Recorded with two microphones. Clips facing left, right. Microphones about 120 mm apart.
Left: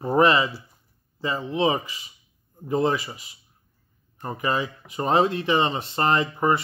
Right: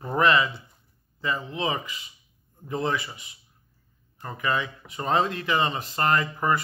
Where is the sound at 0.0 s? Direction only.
30° left (ahead or behind).